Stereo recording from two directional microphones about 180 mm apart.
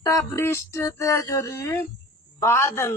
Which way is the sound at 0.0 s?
20° left (ahead or behind).